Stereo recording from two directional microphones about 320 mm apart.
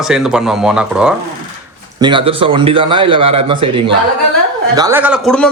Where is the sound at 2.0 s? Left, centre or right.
Centre.